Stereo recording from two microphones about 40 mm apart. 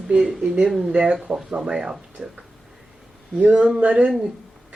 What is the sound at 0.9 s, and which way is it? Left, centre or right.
Speech, right.